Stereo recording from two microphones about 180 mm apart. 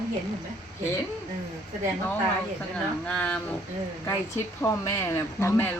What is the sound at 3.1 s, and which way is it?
Speech, 5° left (ahead or behind).